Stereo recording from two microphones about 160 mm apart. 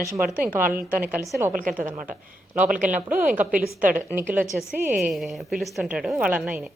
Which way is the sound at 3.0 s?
10° right (ahead or behind).